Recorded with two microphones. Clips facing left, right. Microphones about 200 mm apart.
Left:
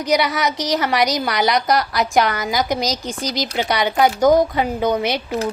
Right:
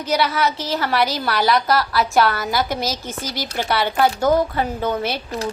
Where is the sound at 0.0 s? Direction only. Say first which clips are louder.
Left 1 dB; 15° left (ahead or behind).